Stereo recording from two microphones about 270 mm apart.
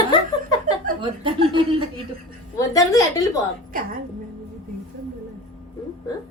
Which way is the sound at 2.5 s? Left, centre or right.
Centre.